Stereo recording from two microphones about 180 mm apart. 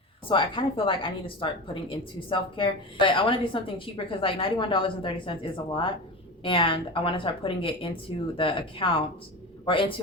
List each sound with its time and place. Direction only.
0.3 s a woman's voice: 30° left (ahead or behind)